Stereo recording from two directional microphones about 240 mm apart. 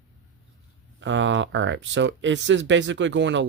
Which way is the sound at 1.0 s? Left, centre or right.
Right.